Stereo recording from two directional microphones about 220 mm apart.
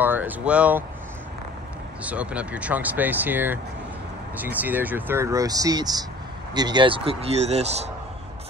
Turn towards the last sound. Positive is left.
turn(degrees=-30)  # may be behind; listen again after turning